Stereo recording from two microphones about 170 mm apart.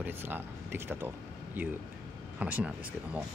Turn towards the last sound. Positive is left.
turn(degrees=-10)  # may be behind; listen again after turning